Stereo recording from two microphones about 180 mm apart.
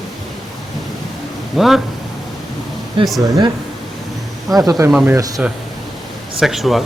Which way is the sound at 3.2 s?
20° right (ahead or behind).